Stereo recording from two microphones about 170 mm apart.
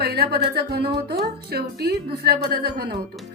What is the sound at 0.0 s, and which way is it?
A woman's voice, 70° right (ahead or behind).